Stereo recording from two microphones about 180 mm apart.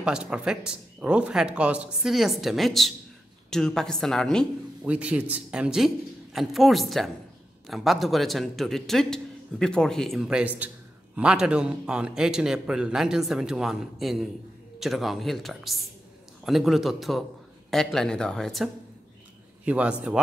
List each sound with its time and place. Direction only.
0.0 s a man's voice: 5° right (ahead or behind)